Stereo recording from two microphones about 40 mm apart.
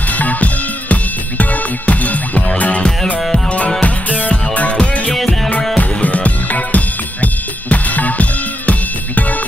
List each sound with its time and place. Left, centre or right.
0.2 s music: left
3.8 s music: left